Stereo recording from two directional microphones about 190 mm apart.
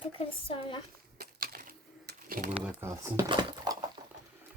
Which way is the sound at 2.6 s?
10° right (ahead or behind).